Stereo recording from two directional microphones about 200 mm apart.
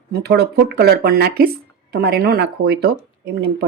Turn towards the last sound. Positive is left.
turn(degrees=-55)  # may be behind; listen again after turning